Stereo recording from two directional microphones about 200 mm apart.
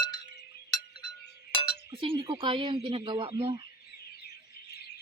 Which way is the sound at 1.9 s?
25° right (ahead or behind).